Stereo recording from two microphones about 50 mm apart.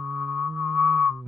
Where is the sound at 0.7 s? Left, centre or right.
Centre.